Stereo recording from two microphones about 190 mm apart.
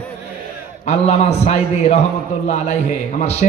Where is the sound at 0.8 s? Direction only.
35° left (ahead or behind).